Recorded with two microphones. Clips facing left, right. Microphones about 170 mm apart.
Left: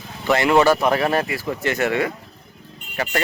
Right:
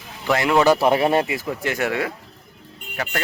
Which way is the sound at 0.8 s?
25° right (ahead or behind).